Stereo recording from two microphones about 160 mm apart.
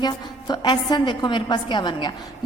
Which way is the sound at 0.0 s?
25° left (ahead or behind).